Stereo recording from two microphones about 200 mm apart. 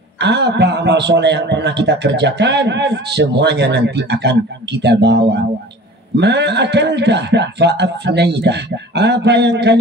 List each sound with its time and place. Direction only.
0.2 s a man's voice: 60° right (ahead or behind)